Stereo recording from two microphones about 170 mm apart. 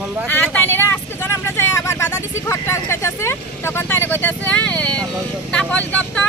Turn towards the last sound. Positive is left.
turn(degrees=10)  # may be behind; listen again after turning